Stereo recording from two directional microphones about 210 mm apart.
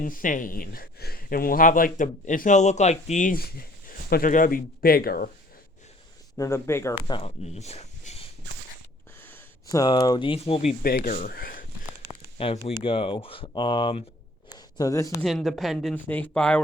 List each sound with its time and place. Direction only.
0.0 s speech: 40° left (ahead or behind)
6.3 s speech: 15° left (ahead or behind)
7.1 s speech: 30° left (ahead or behind)
9.2 s speech: 15° left (ahead or behind); by 10.8 s 30° left (ahead or behind)
10.8 s speech: 40° left (ahead or behind)
12.4 s speech: 25° left (ahead or behind)
14.5 s a sound: 15° left (ahead or behind)
15.2 s speech: centre (ahead or behind)